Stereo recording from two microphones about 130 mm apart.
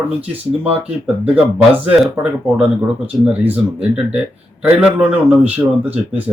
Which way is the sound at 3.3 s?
5° right (ahead or behind).